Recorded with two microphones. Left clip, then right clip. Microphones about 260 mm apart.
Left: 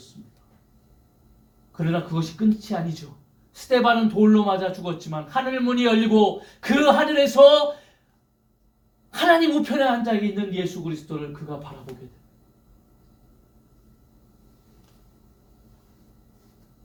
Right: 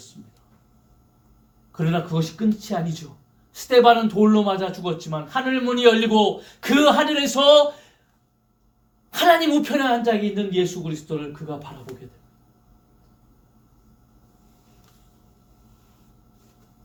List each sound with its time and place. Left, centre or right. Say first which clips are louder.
1.7 s speech: right 2 dB; right
9.0 s speech: right 1 dB; right